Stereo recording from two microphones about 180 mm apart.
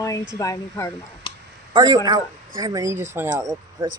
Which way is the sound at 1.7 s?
20° right (ahead or behind).